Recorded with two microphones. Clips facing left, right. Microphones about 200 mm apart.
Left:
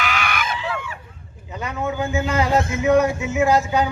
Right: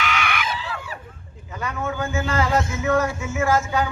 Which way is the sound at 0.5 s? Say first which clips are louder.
Left 4 dB; 35° right (ahead or behind).